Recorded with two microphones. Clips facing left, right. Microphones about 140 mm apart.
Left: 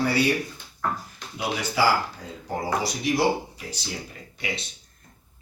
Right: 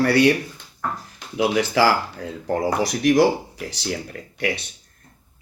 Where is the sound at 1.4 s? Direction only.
90° right.